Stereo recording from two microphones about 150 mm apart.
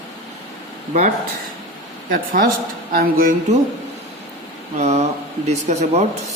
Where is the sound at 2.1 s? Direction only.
70° right (ahead or behind).